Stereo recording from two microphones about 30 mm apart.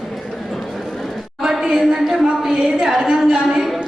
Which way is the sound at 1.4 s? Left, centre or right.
Centre.